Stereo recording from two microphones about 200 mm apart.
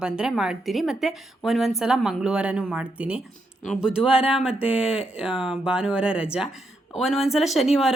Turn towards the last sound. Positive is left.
turn(degrees=0)  # may be behind; listen again after turning